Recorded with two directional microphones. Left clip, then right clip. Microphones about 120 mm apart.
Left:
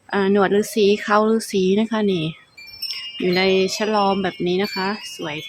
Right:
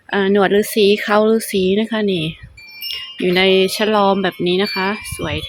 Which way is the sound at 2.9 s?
30° right (ahead or behind).